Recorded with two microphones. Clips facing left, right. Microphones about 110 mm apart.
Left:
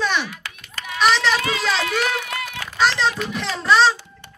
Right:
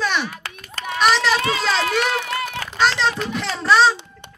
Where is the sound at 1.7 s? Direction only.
35° right (ahead or behind).